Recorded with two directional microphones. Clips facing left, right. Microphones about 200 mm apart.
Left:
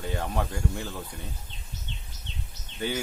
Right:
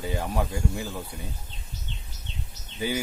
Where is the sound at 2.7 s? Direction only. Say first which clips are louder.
Right 2 dB; 10° right (ahead or behind).